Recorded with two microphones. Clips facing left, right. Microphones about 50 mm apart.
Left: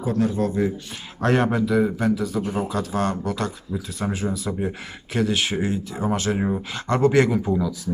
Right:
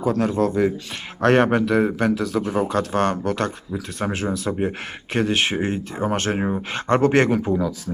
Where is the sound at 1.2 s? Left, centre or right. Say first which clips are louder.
Right 4 dB; right.